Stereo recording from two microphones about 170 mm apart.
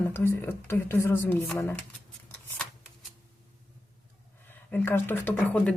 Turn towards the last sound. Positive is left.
turn(degrees=10)  # may be behind; listen again after turning